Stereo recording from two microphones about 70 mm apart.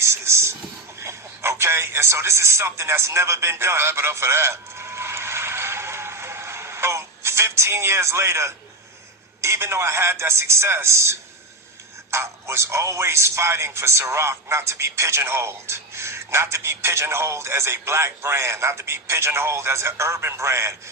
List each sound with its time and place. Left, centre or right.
0.0 s a sound: right
0.9 s radio: right
9.4 s speech: right